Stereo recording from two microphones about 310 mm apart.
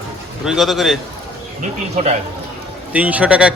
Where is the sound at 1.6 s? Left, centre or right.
Right.